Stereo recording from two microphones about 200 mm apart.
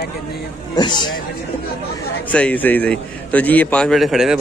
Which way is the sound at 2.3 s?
5° left (ahead or behind).